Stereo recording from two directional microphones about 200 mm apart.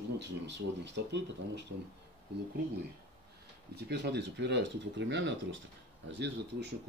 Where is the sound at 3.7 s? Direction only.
55° right (ahead or behind).